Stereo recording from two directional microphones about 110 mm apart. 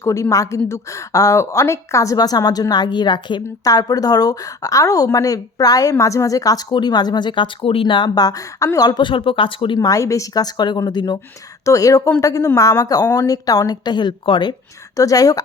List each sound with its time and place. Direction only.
0.0 s a woman's voice: 30° left (ahead or behind); by 3.4 s 45° left (ahead or behind)
3.6 s a woman's voice: 35° left (ahead or behind); by 9.7 s 55° left (ahead or behind)
9.7 s a woman's voice: 30° left (ahead or behind)
14.9 s a woman's voice: 30° left (ahead or behind)